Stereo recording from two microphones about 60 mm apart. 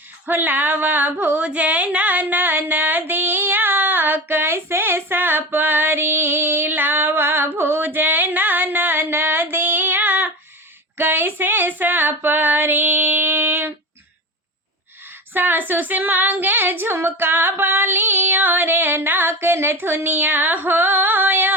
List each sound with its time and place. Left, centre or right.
0.3 s female singing: right
1.5 s a sound: right
11.8 s female singing: right
15.3 s female singing: right